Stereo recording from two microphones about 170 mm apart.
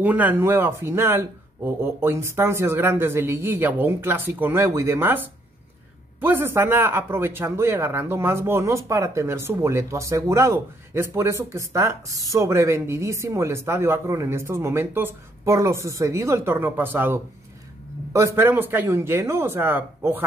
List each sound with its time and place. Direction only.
0.0 s speech: 10° right (ahead or behind)